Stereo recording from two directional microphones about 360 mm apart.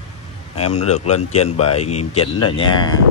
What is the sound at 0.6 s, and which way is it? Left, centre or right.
Speech, centre.